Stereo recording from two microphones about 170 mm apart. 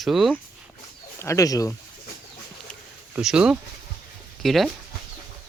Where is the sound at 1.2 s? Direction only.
20° left (ahead or behind).